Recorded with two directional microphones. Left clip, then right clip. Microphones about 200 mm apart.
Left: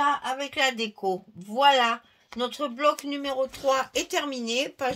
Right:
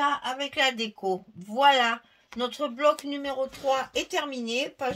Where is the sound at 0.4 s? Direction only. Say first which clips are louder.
Even; 30° left (ahead or behind).